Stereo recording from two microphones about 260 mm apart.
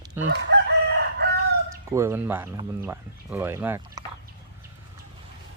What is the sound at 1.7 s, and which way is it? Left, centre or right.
Speech, centre.